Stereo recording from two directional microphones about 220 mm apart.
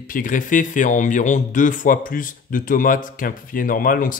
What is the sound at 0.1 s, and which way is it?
Speech, 35° left (ahead or behind).